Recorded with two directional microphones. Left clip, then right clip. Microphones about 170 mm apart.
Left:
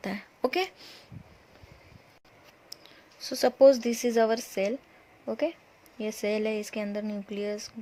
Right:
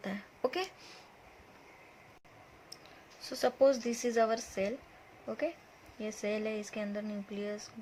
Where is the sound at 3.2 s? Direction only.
40° left (ahead or behind).